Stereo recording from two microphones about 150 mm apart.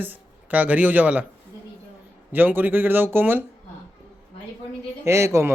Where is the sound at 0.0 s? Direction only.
10° right (ahead or behind).